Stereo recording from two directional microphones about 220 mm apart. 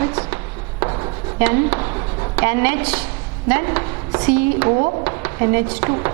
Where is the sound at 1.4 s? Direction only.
15° right (ahead or behind).